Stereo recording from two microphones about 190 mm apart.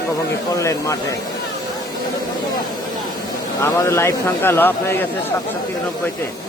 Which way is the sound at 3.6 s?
15° left (ahead or behind).